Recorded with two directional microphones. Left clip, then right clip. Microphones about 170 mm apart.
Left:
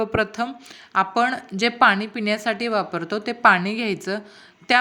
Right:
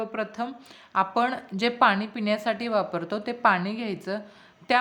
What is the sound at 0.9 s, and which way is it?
A woman's voice, 15° left (ahead or behind).